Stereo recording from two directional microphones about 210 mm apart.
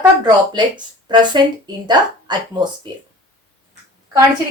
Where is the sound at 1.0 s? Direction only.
20° right (ahead or behind).